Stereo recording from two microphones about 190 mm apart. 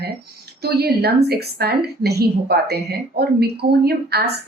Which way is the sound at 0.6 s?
55° right (ahead or behind).